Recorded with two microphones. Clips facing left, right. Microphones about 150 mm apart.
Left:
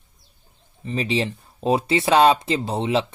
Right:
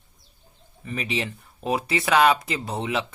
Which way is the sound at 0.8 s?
30° left (ahead or behind).